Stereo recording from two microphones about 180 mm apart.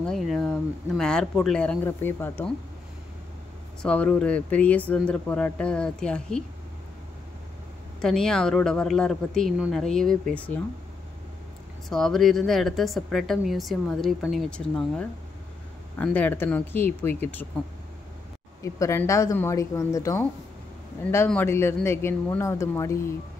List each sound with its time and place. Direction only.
0.0 s a woman's voice: centre (ahead or behind)
3.8 s speech: 5° left (ahead or behind)
8.0 s a woman's voice: 5° left (ahead or behind)
11.9 s a woman's voice: centre (ahead or behind)
18.6 s speech: 15° left (ahead or behind)
21.3 s speech: 10° left (ahead or behind)